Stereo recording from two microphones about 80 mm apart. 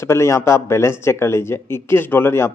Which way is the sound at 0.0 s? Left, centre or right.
Left.